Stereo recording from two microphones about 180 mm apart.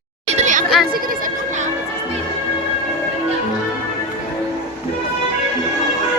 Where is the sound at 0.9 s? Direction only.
50° right (ahead or behind).